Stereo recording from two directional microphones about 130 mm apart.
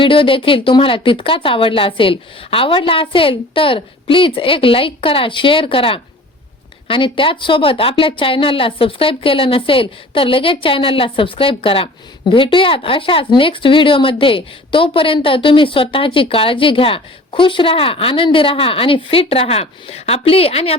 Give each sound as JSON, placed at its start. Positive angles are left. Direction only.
{"t": 0.0, "sound": "a woman's voice", "side_deg": 40}